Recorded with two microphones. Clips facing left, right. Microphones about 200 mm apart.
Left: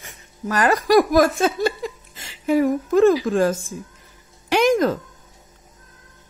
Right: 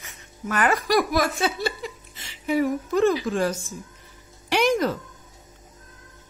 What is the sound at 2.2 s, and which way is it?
Music, 45° left (ahead or behind).